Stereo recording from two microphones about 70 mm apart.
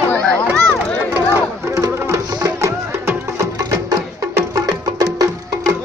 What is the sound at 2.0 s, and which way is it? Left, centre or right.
Music, right.